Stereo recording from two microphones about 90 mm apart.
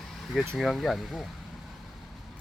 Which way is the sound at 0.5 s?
Centre (ahead or behind).